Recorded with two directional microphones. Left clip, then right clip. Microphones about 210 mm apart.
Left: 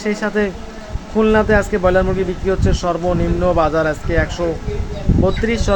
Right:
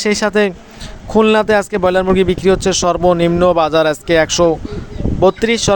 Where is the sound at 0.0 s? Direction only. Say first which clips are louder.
Right 5 dB; 50° right (ahead or behind).